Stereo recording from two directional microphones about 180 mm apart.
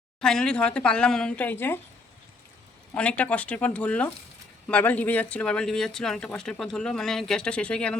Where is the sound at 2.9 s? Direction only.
5° left (ahead or behind).